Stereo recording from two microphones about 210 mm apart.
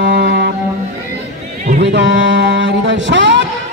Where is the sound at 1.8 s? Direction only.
55° right (ahead or behind).